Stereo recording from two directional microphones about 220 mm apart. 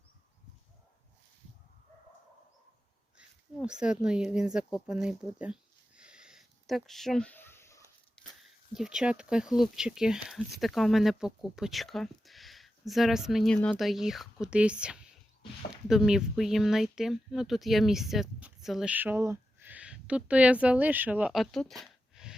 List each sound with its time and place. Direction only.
3.2 s speech: 5° right (ahead or behind)
6.0 s a sound: 5° right (ahead or behind); by 8.2 s 10° left (ahead or behind)
8.7 s speech: 5° right (ahead or behind)